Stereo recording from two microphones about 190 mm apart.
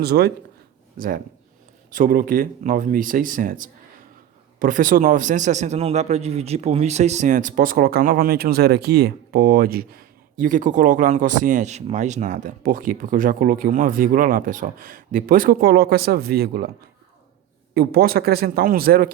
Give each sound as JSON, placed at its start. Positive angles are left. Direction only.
{"t": 0.0, "sound": "a man's voice", "side_deg": -60}
{"t": 17.7, "sound": "a man's voice", "side_deg": -55}